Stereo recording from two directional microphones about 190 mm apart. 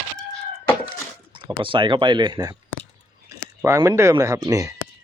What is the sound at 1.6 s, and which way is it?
Speech, 25° right (ahead or behind).